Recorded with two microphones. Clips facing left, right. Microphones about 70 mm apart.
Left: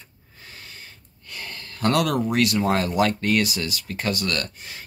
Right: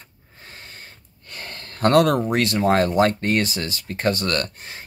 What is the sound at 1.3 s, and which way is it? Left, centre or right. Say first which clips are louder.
Speech: even; right.